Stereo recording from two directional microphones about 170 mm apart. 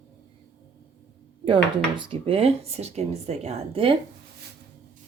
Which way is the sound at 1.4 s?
30° right (ahead or behind).